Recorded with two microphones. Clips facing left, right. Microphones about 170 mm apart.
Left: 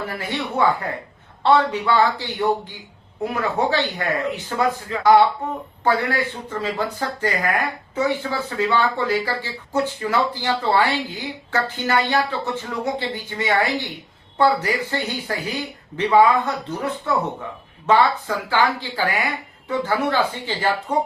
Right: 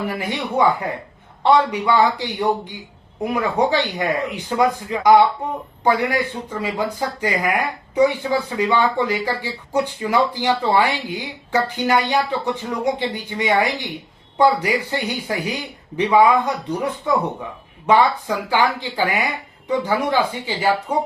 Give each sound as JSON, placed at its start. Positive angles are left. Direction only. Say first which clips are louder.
{"t": 0.2, "sound": "speech", "louder": "right 1 dB", "side_deg": -15}